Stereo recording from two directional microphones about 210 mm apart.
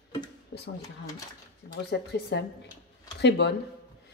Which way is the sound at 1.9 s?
55° left (ahead or behind).